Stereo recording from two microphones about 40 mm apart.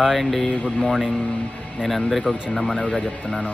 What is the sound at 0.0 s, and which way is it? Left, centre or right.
Speech, centre.